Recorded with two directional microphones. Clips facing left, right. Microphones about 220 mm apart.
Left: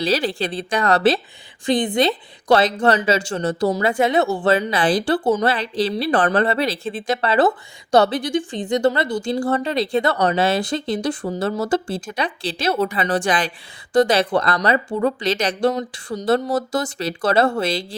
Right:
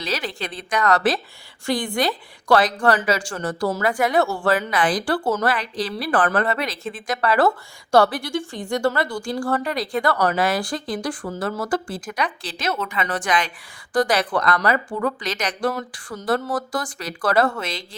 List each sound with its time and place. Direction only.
0.0 s a woman's voice: 30° left (ahead or behind)